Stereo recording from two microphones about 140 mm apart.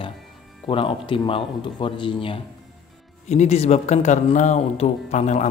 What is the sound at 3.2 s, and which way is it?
Speech, 50° left (ahead or behind).